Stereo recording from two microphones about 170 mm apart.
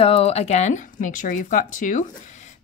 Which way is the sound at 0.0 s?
35° left (ahead or behind).